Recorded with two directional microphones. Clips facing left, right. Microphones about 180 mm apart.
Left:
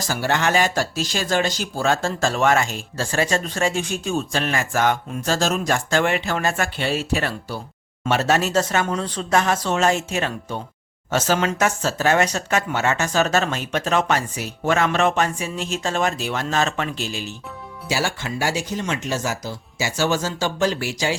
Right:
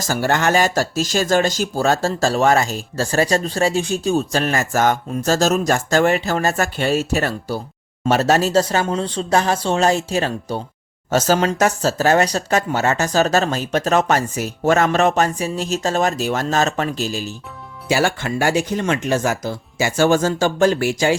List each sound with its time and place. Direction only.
0.0 s speech: 45° right (ahead or behind)
17.8 s speech: 55° right (ahead or behind)